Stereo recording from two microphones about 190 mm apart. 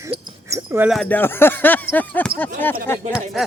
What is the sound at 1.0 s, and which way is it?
Speech, 10° left (ahead or behind).